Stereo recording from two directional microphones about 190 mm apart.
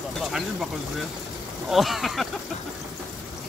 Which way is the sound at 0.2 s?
Centre (ahead or behind).